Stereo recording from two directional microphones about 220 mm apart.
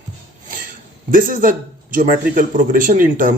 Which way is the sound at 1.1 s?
40° right (ahead or behind).